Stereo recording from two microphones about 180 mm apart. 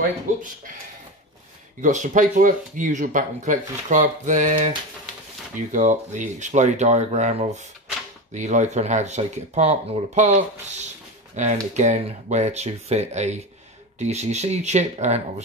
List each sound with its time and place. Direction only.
1.8 s speech: 45° right (ahead or behind)